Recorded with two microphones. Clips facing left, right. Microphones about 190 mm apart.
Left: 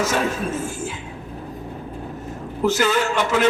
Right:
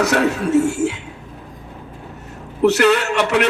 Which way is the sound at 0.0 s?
70° right (ahead or behind).